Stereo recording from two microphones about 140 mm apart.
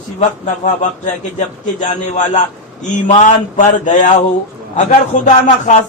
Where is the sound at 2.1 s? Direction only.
60° left (ahead or behind).